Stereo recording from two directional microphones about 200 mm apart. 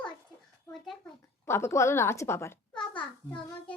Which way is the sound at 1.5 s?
10° left (ahead or behind).